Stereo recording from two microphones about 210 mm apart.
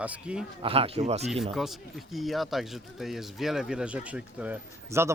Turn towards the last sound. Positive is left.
turn(degrees=-10)  # may be behind; listen again after turning